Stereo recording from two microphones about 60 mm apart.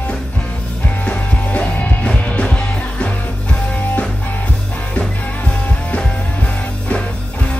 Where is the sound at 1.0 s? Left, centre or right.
Left.